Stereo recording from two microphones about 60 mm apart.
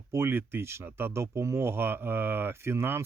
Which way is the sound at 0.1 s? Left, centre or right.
Right.